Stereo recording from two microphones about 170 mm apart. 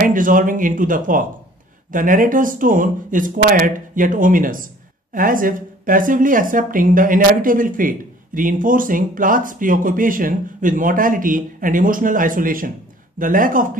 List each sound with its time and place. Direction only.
0.0 s speech: 50° right (ahead or behind)